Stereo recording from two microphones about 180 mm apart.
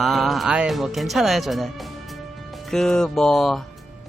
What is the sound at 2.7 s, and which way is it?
Speech, 5° left (ahead or behind).